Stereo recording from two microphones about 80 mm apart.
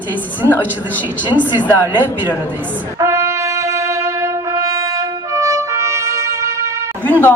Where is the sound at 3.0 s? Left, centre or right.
Right.